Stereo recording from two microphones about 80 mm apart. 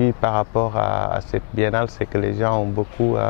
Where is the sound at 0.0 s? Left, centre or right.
Centre.